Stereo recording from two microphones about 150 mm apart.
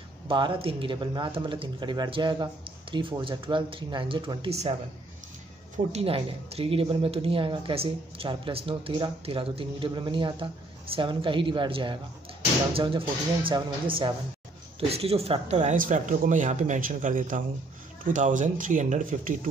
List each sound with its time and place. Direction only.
0.3 s speech: 35° right (ahead or behind)
5.9 s speech: 40° right (ahead or behind); by 19.3 s 60° right (ahead or behind)